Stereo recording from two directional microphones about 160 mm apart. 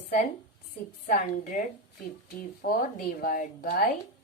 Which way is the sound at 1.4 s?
55° left (ahead or behind).